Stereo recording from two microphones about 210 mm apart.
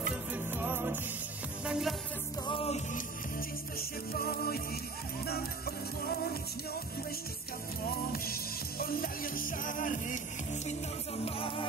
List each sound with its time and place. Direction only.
0.1 s music: 10° right (ahead or behind)
2.4 s music: 25° left (ahead or behind)
4.1 s music: 45° left (ahead or behind)
8.1 s music: 45° left (ahead or behind); by 11.6 s 25° left (ahead or behind)